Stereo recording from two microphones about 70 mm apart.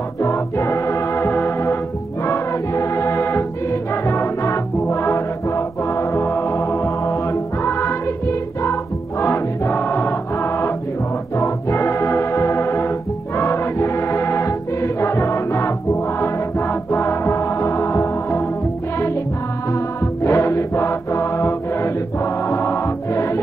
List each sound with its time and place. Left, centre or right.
0.2 s music: left
2.2 s music: left
20.2 s mantra: left